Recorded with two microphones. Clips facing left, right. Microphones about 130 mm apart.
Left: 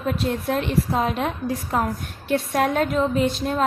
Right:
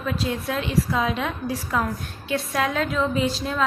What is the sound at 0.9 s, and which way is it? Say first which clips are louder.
Speech: left 2 dB; 45° left (ahead or behind).